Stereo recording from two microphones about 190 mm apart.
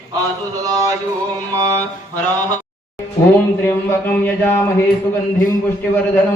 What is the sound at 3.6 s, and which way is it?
Speech, 10° left (ahead or behind).